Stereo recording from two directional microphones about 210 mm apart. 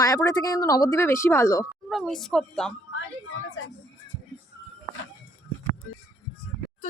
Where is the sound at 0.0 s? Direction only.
15° left (ahead or behind).